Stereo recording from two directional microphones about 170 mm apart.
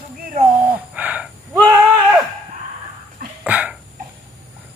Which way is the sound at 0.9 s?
10° right (ahead or behind).